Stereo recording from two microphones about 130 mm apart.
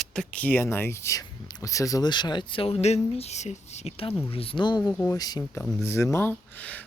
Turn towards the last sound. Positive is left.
turn(degrees=10)  # may be behind; listen again after turning